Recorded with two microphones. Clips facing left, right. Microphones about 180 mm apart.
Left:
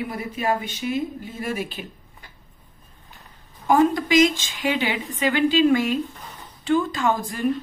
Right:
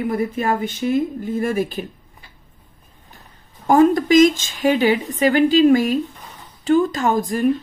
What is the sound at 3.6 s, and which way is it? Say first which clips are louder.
A woman's voice: right 5 dB; 45° right (ahead or behind).